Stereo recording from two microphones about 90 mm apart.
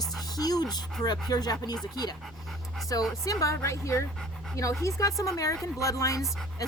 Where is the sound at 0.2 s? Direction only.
45° left (ahead or behind).